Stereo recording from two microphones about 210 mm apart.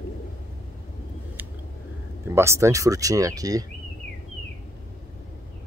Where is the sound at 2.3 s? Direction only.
10° right (ahead or behind).